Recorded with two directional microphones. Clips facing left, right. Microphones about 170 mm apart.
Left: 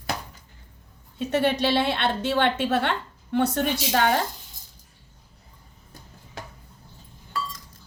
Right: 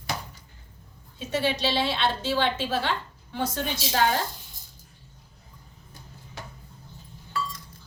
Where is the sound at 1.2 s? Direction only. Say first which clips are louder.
Left 4 dB; 60° left (ahead or behind).